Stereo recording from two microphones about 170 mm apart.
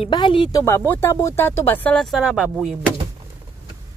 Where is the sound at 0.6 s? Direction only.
15° left (ahead or behind); by 2.9 s 5° right (ahead or behind).